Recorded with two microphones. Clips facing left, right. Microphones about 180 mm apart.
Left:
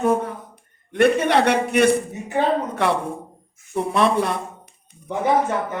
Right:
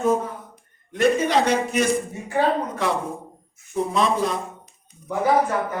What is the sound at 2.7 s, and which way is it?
A man's voice, 65° left (ahead or behind).